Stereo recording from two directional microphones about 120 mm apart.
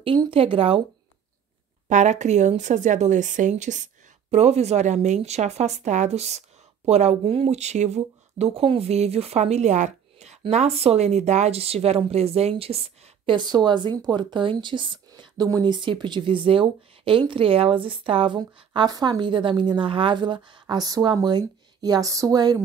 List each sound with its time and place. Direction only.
0.3 s a woman's voice: 50° right (ahead or behind)
1.9 s a woman's voice: 80° right; by 22.6 s 30° right (ahead or behind)